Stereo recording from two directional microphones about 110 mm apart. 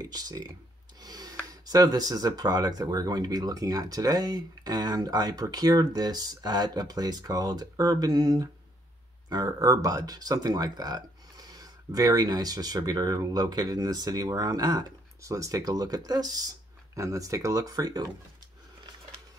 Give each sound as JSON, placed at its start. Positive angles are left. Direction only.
{"t": 0.0, "sound": "speech", "side_deg": -35}
{"t": 1.0, "sound": "a sound", "side_deg": -35}
{"t": 1.5, "sound": "speech", "side_deg": -35}